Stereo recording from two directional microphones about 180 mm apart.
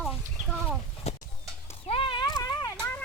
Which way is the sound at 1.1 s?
35° left (ahead or behind).